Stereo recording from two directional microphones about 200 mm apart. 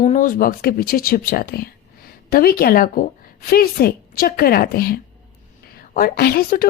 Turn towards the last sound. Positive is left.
turn(degrees=50)  # may be behind; listen again after turning